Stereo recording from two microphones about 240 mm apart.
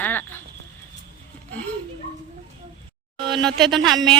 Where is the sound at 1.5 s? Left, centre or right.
Centre.